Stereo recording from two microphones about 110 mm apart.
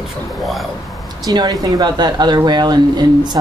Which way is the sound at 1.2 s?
35° right (ahead or behind).